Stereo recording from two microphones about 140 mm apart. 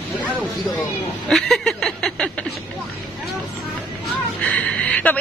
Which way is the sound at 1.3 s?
5° left (ahead or behind).